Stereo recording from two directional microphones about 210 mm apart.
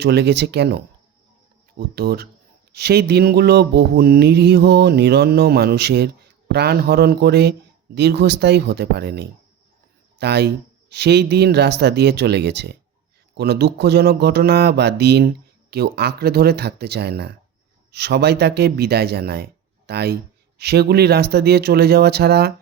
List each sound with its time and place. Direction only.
0.0 s mantra: 55° right (ahead or behind)
2.0 s mantra: 50° right (ahead or behind)